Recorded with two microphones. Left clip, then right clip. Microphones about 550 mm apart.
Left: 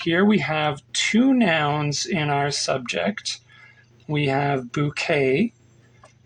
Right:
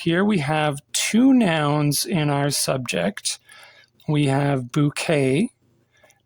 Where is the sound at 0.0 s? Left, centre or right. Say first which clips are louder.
Left 1 dB; right.